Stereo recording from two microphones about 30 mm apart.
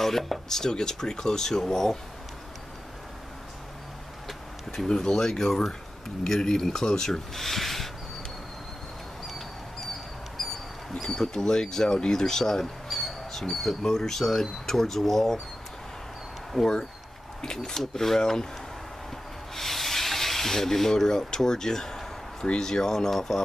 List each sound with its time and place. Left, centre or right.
0.0 s speech: centre
0.5 s speech: centre
4.8 s speech: centre
7.3 s speech: centre
9.8 s a sound: centre
11.1 s speech: left
12.8 s bird: centre
13.8 s speech: centre
16.5 s speech: centre
19.5 s rub: centre
22.6 s speech: centre